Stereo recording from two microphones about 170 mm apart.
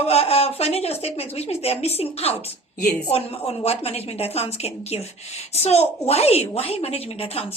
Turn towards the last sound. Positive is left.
turn(degrees=35)  # may be behind; listen again after turning